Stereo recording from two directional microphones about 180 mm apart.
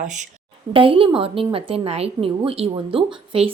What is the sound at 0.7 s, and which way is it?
A woman's voice, 30° right (ahead or behind).